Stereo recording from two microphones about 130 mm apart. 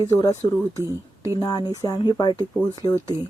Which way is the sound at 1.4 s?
30° left (ahead or behind).